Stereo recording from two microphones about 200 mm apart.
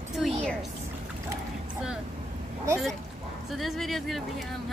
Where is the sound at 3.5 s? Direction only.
Centre (ahead or behind).